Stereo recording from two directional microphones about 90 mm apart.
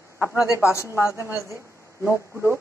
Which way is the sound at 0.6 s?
30° left (ahead or behind).